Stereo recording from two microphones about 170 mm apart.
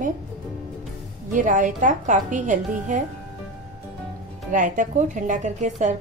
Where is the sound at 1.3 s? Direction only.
50° right (ahead or behind).